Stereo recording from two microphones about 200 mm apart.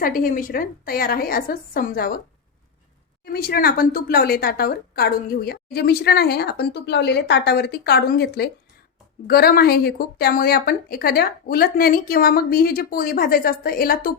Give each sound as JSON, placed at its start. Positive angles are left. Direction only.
{"t": 0.0, "sound": "a woman's voice", "side_deg": 45}
{"t": 3.3, "sound": "a woman's voice", "side_deg": 50}